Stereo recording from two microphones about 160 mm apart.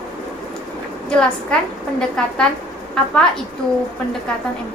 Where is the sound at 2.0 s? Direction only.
5° left (ahead or behind).